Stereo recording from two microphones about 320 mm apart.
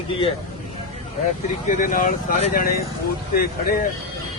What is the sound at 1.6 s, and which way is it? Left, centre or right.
Speech, left.